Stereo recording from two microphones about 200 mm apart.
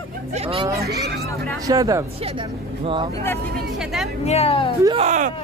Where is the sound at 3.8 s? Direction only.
Centre (ahead or behind).